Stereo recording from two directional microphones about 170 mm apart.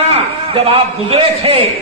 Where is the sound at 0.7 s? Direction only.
35° right (ahead or behind).